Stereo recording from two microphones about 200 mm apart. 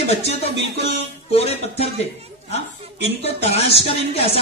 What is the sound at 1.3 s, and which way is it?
Speech, 30° left (ahead or behind).